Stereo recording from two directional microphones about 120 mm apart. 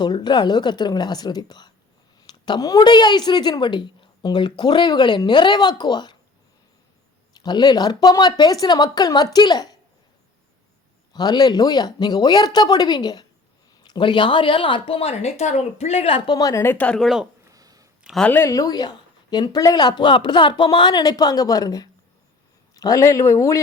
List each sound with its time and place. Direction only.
0.0 s a woman's voice: 35° left (ahead or behind)
7.3 s a woman's voice: 35° left (ahead or behind)
11.1 s a woman's voice: 35° left (ahead or behind)
16.6 s speech: 10° left (ahead or behind)
17.0 s speech: centre (ahead or behind)
17.5 s a sound: 30° right (ahead or behind)
18.2 s speech: 15° left (ahead or behind)
18.4 s a woman's voice: 30° left (ahead or behind)